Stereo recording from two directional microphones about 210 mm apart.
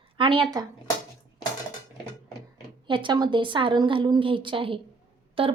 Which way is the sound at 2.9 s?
20° right (ahead or behind).